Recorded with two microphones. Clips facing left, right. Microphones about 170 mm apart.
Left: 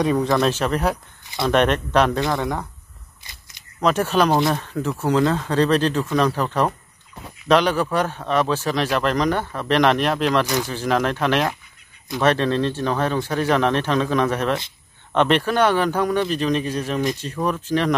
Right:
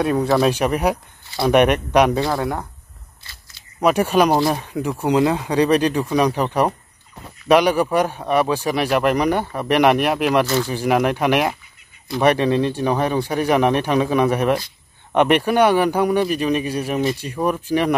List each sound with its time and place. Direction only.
0.0 s speech: 5° right (ahead or behind)
3.3 s a sound: 15° left (ahead or behind)
3.8 s speech: 10° right (ahead or behind)
10.4 s speech: 15° left (ahead or behind)
10.7 s speech: 10° right (ahead or behind)